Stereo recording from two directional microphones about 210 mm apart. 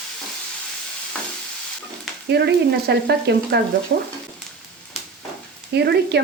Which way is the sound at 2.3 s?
50° right (ahead or behind).